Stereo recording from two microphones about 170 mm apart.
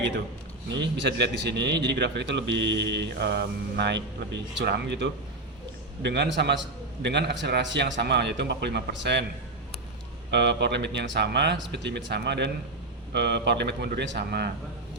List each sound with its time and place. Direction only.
0.7 s a man's voice: 90° right
10.3 s a man's voice: 90° right; by 14.5 s 75° right (ahead or behind)